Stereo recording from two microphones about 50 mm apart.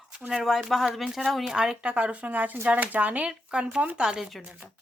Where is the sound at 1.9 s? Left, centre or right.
Right.